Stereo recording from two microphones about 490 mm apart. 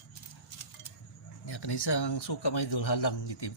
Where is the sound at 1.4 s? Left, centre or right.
Left.